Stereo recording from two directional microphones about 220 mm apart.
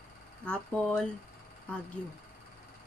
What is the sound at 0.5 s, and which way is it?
Speech, 5° left (ahead or behind).